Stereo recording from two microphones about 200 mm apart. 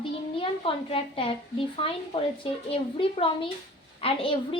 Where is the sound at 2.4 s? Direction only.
25° left (ahead or behind).